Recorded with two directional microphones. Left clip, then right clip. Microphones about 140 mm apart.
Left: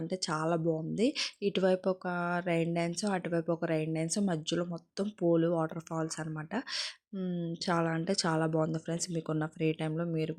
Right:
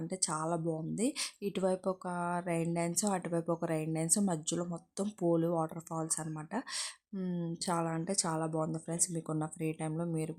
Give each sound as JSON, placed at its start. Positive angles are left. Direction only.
{"t": 0.1, "sound": "speech", "side_deg": 10}
{"t": 7.7, "sound": "speech", "side_deg": 10}